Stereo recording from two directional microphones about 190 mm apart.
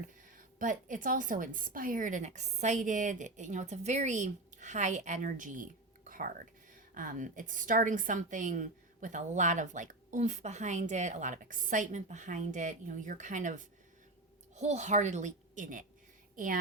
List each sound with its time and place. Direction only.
0.3 s a woman's voice: 45° right (ahead or behind)